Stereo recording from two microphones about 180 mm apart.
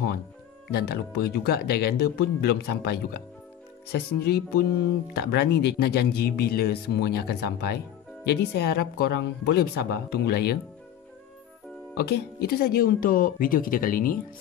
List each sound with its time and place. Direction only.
0.7 s speech: 60° left (ahead or behind)
11.9 s speech: 60° left (ahead or behind)